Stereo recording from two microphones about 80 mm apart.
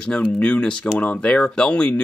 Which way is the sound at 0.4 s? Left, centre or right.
Centre.